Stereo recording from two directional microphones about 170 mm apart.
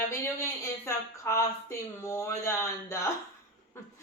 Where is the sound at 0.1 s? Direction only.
15° left (ahead or behind).